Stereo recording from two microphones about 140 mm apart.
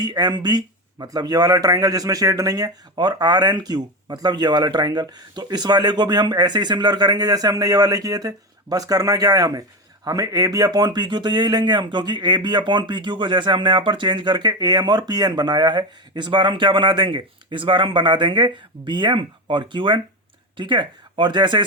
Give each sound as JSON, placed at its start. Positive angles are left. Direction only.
{"t": 0.0, "sound": "speech", "side_deg": -30}